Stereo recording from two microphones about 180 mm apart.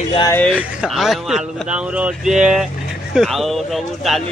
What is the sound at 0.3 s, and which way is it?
Speech, 10° left (ahead or behind).